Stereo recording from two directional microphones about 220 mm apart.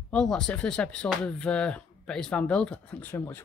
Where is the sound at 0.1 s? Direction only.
5° left (ahead or behind).